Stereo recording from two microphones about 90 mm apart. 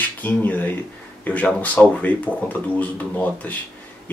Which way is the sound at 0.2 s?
20° left (ahead or behind).